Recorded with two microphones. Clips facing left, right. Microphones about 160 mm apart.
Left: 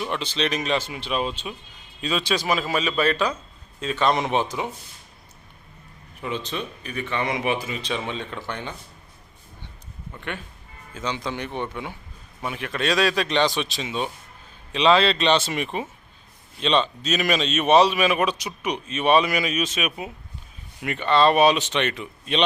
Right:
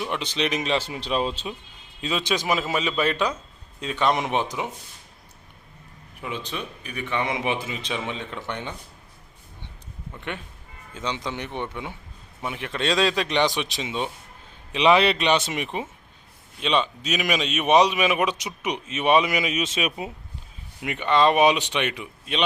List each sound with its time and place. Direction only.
0.1 s speech: 15° right (ahead or behind)
2.0 s a man's voice: 20° right (ahead or behind)
6.2 s a man's voice: 10° right (ahead or behind)
10.2 s a man's voice: 20° right (ahead or behind)
20.8 s a man's voice: 15° right (ahead or behind)